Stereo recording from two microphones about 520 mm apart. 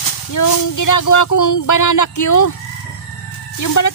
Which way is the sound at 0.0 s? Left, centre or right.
Left.